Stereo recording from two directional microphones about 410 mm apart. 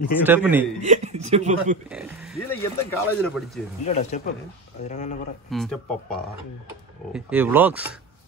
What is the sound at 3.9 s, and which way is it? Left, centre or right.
Speech, centre.